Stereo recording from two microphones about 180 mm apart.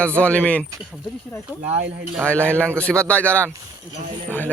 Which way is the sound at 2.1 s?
5° left (ahead or behind).